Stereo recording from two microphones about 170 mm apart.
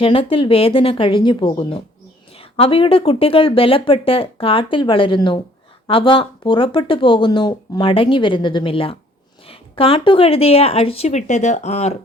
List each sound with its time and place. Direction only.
0.0 s speech: 35° left (ahead or behind)